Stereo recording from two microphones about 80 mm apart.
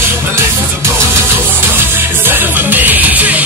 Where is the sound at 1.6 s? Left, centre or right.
Right.